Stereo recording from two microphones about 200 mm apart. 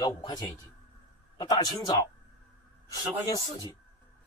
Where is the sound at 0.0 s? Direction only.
20° left (ahead or behind).